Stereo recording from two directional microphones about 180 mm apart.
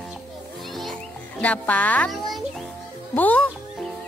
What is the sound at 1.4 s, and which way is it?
Speech, 10° left (ahead or behind).